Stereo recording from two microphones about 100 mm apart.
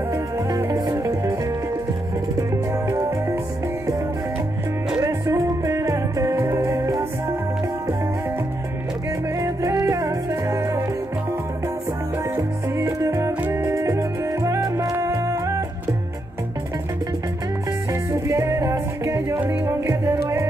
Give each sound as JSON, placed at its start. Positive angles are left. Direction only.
{"t": 0.1, "sound": "music", "side_deg": -30}
{"t": 2.9, "sound": "music", "side_deg": -30}
{"t": 5.0, "sound": "music", "side_deg": -35}
{"t": 9.4, "sound": "music", "side_deg": -30}
{"t": 13.0, "sound": "music", "side_deg": -30}
{"t": 18.1, "sound": "music", "side_deg": -30}